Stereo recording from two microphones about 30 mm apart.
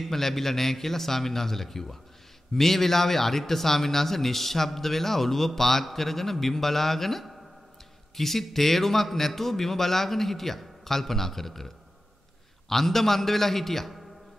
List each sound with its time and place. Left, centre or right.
0.0 s a man's voice: centre